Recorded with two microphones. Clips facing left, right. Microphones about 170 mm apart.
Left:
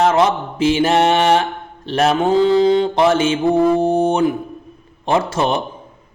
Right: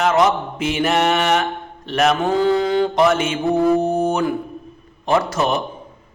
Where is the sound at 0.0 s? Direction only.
30° left (ahead or behind).